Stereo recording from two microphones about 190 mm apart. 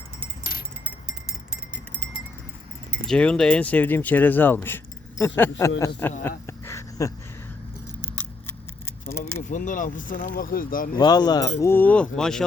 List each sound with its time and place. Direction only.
0.9 s a sound: 5° right (ahead or behind)
3.1 s speech: 5° left (ahead or behind)
6.7 s a sound: 15° left (ahead or behind)
8.0 s scissors: 10° left (ahead or behind)
9.4 s speech: 40° left (ahead or behind)
10.9 s speech: 20° left (ahead or behind); by 12.5 s 5° left (ahead or behind)